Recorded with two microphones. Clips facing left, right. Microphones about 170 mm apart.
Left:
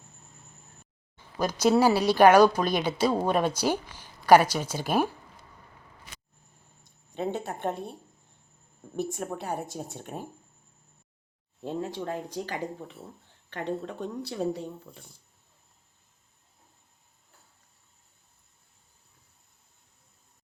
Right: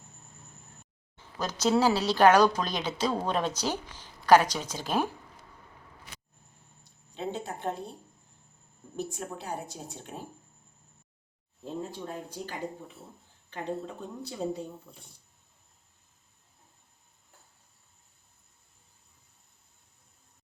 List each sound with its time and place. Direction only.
1.4 s speech: 10° left (ahead or behind)
7.1 s speech: 55° left (ahead or behind)
9.0 s speech: 50° left (ahead or behind)
11.6 s speech: 85° left
13.5 s a woman's voice: 80° left